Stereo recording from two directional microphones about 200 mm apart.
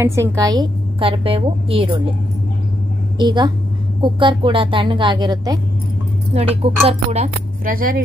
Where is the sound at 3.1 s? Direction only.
20° right (ahead or behind).